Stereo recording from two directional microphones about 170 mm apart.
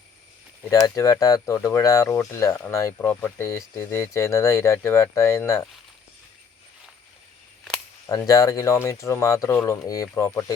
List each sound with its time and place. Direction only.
0.7 s speech: 20° left (ahead or behind)
8.1 s speech: 20° left (ahead or behind)